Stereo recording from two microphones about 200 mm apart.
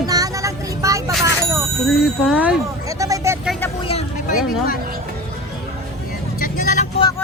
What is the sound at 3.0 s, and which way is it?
Vehicle, 15° right (ahead or behind).